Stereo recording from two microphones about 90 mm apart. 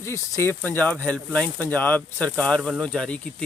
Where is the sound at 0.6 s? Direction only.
15° left (ahead or behind).